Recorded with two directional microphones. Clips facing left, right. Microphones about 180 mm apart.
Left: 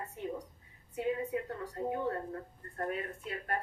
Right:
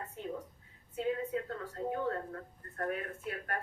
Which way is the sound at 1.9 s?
20° left (ahead or behind).